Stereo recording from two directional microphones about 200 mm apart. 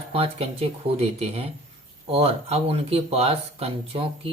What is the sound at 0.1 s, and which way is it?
A man's voice, 30° right (ahead or behind).